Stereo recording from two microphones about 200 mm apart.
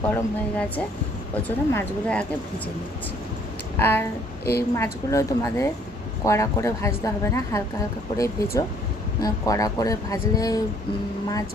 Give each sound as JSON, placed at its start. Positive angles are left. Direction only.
{"t": 0.0, "sound": "speech", "side_deg": 10}
{"t": 3.8, "sound": "speech", "side_deg": 10}